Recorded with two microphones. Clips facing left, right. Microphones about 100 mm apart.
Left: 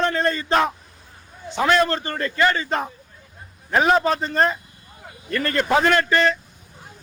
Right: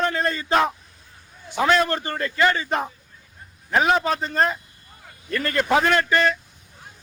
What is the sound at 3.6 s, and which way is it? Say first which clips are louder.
A man's voice: left 2 dB; centre (ahead or behind).